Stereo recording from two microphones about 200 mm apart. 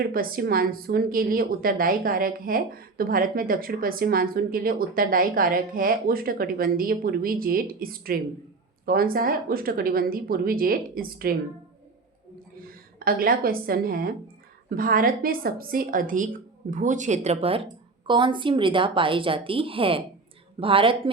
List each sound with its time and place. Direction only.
0.0 s a woman's voice: 45° right (ahead or behind)
13.1 s a woman's voice: 45° right (ahead or behind); by 21.1 s 25° right (ahead or behind)